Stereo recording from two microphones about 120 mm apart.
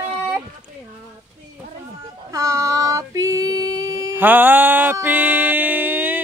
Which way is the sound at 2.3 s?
25° right (ahead or behind).